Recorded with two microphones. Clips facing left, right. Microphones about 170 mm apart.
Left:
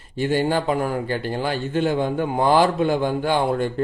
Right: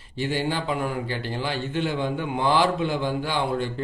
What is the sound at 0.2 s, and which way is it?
A man's voice, 50° left (ahead or behind).